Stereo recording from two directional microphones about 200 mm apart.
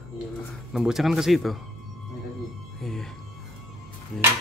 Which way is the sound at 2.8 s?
Centre (ahead or behind).